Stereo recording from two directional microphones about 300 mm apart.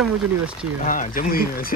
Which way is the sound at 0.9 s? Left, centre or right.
Left.